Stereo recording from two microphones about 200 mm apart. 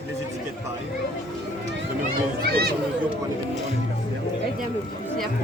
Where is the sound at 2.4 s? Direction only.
50° right (ahead or behind).